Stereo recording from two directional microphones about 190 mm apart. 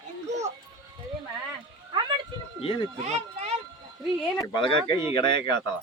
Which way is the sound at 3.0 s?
35° right (ahead or behind).